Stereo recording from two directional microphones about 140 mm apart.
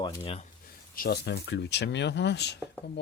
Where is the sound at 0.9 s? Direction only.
90° left.